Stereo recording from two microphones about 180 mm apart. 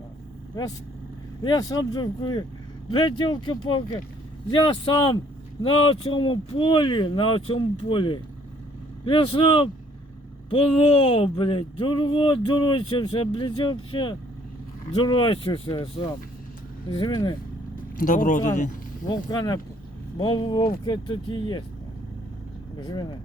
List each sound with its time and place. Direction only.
1.5 s speech: 20° left (ahead or behind)
17.9 s speech: 45° left (ahead or behind)
19.0 s speech: 20° left (ahead or behind)
22.8 s speech: 25° left (ahead or behind)